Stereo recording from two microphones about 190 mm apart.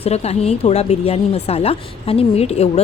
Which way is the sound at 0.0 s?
35° left (ahead or behind).